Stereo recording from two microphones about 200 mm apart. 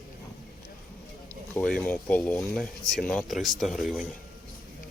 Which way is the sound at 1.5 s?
5° left (ahead or behind).